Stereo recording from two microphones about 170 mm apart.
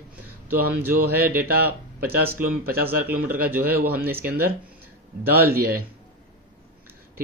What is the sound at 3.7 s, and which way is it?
Speech, 65° right (ahead or behind).